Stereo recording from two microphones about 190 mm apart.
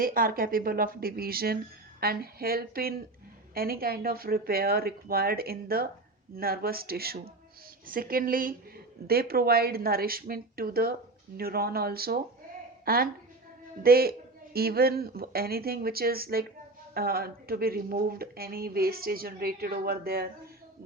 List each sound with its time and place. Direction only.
0.0 s a woman's voice: 50° right (ahead or behind)